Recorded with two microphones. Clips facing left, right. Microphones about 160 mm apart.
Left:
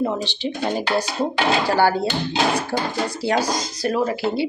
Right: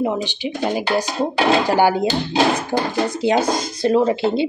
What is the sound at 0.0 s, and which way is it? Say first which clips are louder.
Speech: right 2 dB; 15° right (ahead or behind).